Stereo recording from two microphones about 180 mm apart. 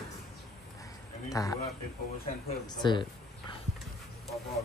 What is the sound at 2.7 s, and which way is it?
Speech, 25° left (ahead or behind).